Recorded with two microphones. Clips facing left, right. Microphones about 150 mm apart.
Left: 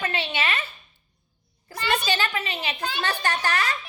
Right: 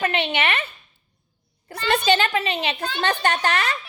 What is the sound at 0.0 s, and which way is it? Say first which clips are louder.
Speech: right 5 dB; 60° right (ahead or behind).